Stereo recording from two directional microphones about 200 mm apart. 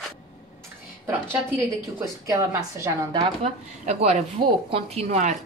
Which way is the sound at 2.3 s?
15° right (ahead or behind).